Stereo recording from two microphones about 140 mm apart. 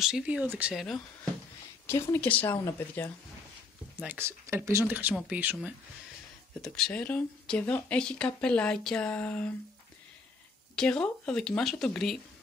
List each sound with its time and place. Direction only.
0.0 s speech: 5° right (ahead or behind)
1.9 s speech: 15° left (ahead or behind)
4.0 s speech: 15° right (ahead or behind)
6.6 s speech: 10° left (ahead or behind)
10.8 s speech: 5° left (ahead or behind)